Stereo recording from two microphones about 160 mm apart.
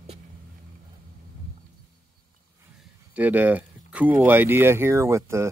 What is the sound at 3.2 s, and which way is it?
Speech, 10° right (ahead or behind).